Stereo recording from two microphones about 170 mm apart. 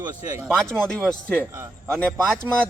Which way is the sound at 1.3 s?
15° right (ahead or behind).